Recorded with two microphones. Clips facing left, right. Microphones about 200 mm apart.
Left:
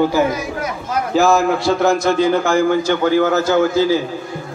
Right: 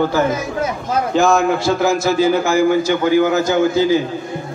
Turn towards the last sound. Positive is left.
turn(degrees=-15)  # may be behind; listen again after turning